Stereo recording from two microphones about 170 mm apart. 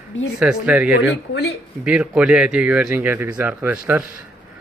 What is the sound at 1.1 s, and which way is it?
Speech, 80° left.